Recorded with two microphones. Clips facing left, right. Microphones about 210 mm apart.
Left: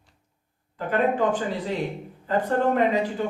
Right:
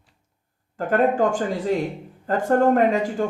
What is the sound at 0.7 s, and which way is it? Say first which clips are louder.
Speech: right 4 dB; 45° right (ahead or behind).